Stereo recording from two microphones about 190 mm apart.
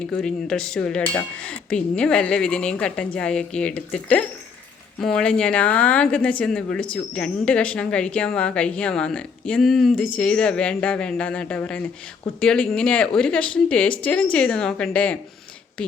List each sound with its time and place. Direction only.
0.1 s speech: 5° left (ahead or behind)